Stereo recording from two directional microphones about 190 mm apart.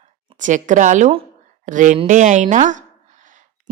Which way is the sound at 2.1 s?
40° right (ahead or behind).